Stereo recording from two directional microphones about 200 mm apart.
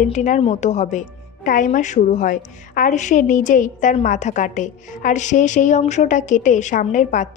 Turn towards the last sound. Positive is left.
turn(degrees=40)  # may be behind; listen again after turning